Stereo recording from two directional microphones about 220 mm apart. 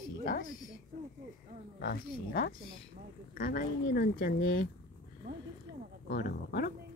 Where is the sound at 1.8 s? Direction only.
50° left (ahead or behind).